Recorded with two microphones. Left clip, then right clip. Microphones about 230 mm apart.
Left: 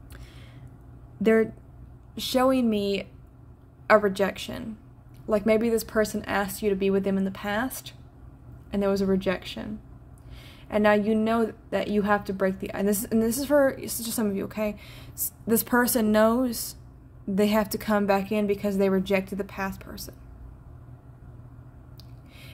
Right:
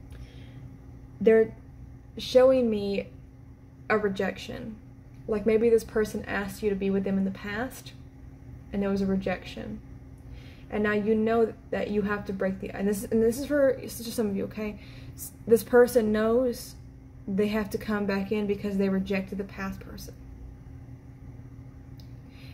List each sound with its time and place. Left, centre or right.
1.2 s a woman's voice: left
10.7 s a woman's voice: left